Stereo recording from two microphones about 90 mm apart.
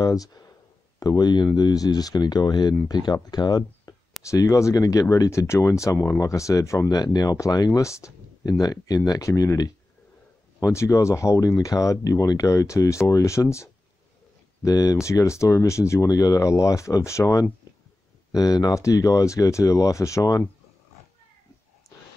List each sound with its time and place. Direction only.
0.0 s speech: 45° left (ahead or behind)
4.3 s speech: 40° left (ahead or behind)
6.9 s speech: 45° left (ahead or behind)
9.3 s speech: 30° left (ahead or behind)
10.6 s speech: 35° left (ahead or behind)
21.8 s a sound: 35° left (ahead or behind)